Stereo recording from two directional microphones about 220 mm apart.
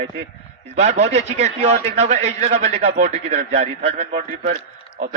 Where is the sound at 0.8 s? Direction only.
30° right (ahead or behind).